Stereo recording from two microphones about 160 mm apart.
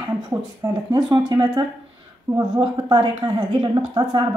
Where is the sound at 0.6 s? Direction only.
20° right (ahead or behind).